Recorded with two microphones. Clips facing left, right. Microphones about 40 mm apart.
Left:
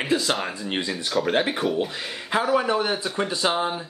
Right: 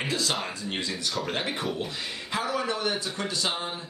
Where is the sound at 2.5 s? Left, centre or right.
Left.